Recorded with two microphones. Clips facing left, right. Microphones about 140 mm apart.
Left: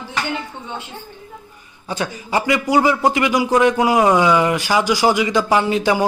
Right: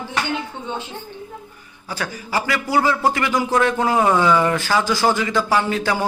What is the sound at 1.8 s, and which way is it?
A man's voice, 20° left (ahead or behind).